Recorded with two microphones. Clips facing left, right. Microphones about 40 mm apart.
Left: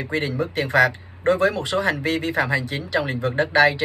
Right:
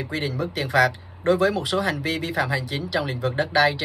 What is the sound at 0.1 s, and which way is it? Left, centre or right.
Speech, left.